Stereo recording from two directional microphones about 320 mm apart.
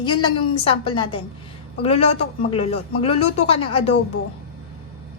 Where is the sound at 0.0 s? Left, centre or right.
Centre.